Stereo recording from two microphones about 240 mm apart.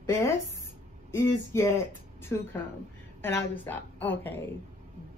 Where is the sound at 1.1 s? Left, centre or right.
Centre.